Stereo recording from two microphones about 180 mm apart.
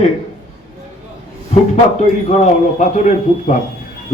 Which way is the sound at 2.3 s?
40° left (ahead or behind).